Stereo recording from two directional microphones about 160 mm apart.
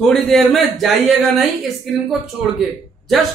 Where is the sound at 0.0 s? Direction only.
Centre (ahead or behind).